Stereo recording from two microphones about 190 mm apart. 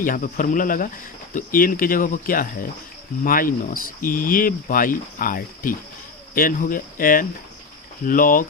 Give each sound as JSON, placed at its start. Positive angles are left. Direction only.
{"t": 0.0, "sound": "speech", "side_deg": 45}